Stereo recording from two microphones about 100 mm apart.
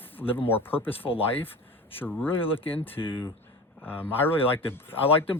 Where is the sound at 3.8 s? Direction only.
20° left (ahead or behind).